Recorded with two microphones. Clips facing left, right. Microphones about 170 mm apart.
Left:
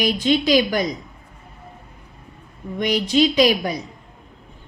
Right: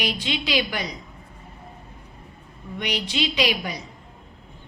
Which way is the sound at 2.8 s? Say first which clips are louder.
Left 9 dB; 45° left (ahead or behind).